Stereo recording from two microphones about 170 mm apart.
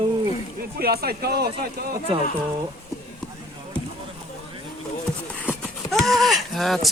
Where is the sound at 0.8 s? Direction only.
65° right (ahead or behind).